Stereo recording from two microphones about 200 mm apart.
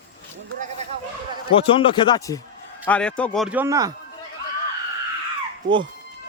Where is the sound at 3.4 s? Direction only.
10° right (ahead or behind).